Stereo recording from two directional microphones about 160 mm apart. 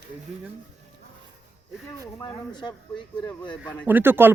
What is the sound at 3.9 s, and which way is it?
Speech, 10° right (ahead or behind).